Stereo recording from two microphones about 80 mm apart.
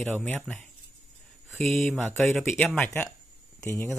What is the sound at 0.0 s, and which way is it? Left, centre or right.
Speech, centre.